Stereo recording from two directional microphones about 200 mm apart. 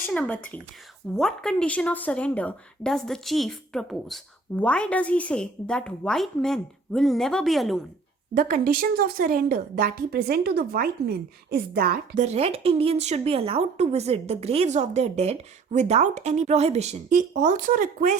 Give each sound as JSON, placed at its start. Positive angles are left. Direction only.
{"t": 0.0, "sound": "a woman's voice", "side_deg": 10}
{"t": 8.4, "sound": "a woman's voice", "side_deg": -45}
{"t": 12.2, "sound": "speech", "side_deg": -30}